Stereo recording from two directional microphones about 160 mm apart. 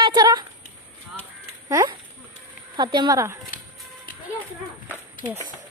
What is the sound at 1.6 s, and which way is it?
Speech, 20° right (ahead or behind).